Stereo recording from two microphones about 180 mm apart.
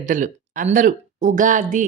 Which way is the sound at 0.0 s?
45° right (ahead or behind).